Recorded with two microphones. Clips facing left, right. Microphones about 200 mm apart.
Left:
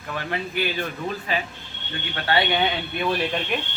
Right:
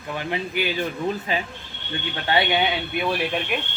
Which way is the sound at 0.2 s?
15° right (ahead or behind).